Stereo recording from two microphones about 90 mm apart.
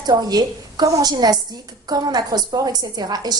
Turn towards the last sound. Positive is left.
turn(degrees=-50)  # may be behind; listen again after turning